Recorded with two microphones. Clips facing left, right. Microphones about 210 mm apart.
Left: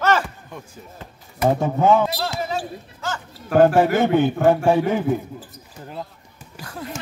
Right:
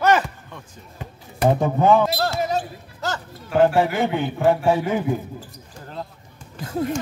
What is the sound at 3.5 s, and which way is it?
Speech, 50° left (ahead or behind).